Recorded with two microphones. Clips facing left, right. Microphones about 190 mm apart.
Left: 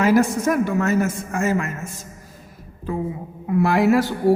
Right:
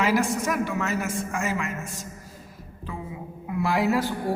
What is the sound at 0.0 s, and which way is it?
A man's voice, 45° left (ahead or behind).